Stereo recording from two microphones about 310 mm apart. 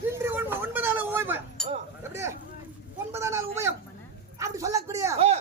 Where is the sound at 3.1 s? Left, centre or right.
Centre.